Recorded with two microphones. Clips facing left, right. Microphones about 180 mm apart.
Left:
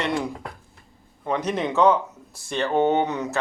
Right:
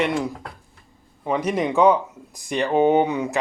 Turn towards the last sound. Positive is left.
turn(degrees=-10)  # may be behind; listen again after turning